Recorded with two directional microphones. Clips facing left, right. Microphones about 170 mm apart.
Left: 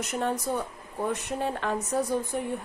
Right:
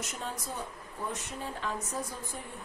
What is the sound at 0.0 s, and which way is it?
A woman's voice, 65° left (ahead or behind).